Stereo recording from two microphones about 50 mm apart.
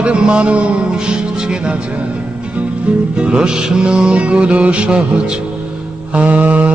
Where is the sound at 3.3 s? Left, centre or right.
Centre.